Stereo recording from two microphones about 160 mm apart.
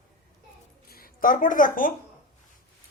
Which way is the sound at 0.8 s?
65° left (ahead or behind).